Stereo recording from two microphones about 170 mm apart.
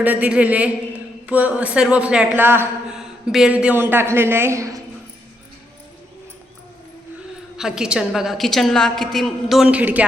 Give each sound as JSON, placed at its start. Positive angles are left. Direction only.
{"t": 0.0, "sound": "a man's voice", "side_deg": -10}
{"t": 7.5, "sound": "a woman's voice", "side_deg": -5}